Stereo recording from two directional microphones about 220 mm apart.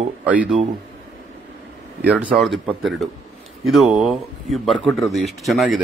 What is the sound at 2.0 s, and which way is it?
Speech, 5° right (ahead or behind).